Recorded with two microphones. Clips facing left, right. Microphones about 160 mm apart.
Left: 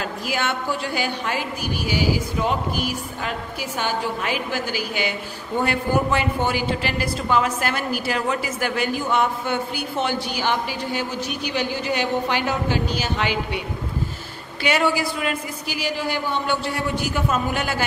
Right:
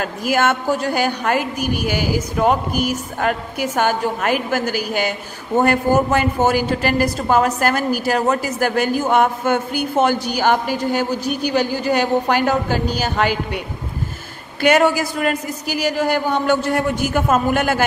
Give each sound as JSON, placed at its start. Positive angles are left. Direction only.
{"t": 0.0, "sound": "a man's voice", "side_deg": -50}
{"t": 14.6, "sound": "a man's voice", "side_deg": -45}